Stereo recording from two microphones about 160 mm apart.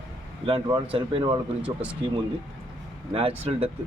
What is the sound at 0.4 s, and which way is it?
Speech, 35° right (ahead or behind).